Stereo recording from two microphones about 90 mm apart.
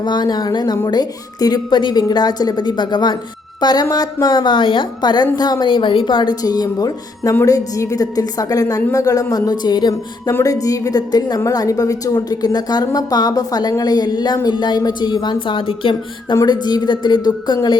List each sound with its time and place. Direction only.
0.0 s a woman's voice: 55° left (ahead or behind)
6.4 s a woman's voice: 45° left (ahead or behind); by 16.0 s 75° left (ahead or behind)
16.3 s a woman's voice: 50° left (ahead or behind)